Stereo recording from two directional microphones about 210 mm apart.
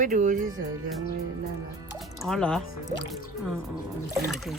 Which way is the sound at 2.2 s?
5° left (ahead or behind).